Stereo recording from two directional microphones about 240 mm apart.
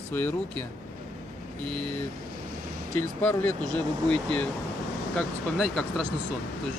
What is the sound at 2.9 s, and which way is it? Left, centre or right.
Speech, centre.